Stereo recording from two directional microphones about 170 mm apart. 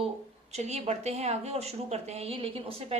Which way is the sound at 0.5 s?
40° right (ahead or behind).